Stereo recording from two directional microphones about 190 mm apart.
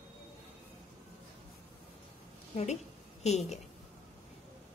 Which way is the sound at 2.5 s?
35° left (ahead or behind).